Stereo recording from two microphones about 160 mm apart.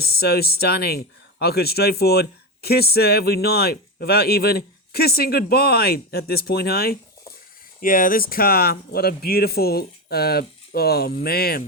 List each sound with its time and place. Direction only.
0.0 s speech: 75° left (ahead or behind)
7.8 s speech: 60° left (ahead or behind)